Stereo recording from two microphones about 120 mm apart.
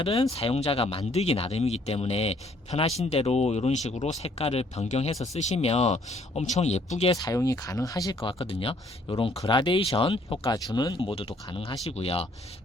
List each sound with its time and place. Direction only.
0.1 s speech: 30° left (ahead or behind)
0.3 s speech: 55° left (ahead or behind)
7.2 s speech: 30° left (ahead or behind)
8.2 s speech: 50° left (ahead or behind)
10.4 s speech: 30° left (ahead or behind); by 12.3 s 55° left (ahead or behind)